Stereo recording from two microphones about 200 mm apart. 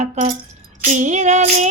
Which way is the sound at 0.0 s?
35° right (ahead or behind).